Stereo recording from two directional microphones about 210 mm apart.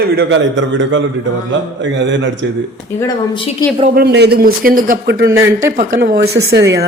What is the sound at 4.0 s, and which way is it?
A man's voice, 50° right (ahead or behind).